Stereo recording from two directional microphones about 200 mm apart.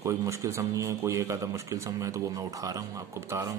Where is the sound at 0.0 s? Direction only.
15° right (ahead or behind).